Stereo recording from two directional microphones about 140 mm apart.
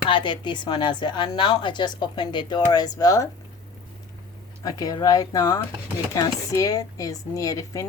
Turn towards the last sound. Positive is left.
turn(degrees=25)  # may be behind; listen again after turning